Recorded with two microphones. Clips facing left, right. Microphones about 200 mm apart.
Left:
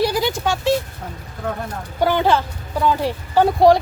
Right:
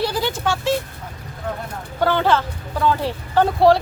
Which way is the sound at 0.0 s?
15° left (ahead or behind).